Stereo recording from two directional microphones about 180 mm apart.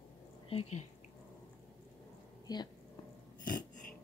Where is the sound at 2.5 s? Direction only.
20° left (ahead or behind).